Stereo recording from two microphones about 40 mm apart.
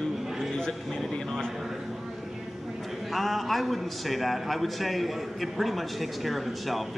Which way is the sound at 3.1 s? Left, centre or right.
Centre.